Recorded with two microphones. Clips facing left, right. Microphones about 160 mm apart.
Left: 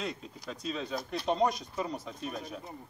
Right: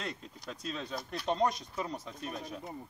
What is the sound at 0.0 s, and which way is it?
Speech, centre (ahead or behind).